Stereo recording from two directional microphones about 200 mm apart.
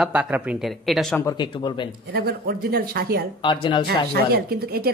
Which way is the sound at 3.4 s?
25° left (ahead or behind).